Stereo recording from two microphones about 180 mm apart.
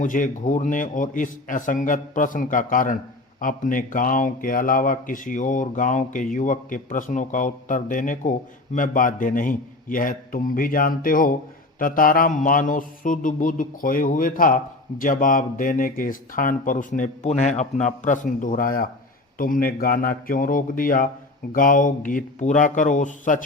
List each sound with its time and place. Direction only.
0.0 s speech: 45° left (ahead or behind)